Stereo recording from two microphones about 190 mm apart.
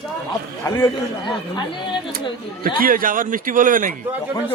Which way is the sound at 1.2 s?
25° left (ahead or behind).